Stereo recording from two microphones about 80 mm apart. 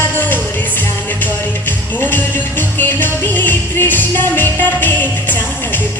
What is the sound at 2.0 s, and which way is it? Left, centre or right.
Music, left.